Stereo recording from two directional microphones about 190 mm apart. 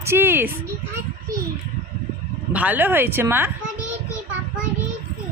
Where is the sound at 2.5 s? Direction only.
10° right (ahead or behind).